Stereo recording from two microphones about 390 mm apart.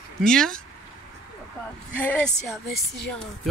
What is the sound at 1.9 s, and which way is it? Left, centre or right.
Speech, centre.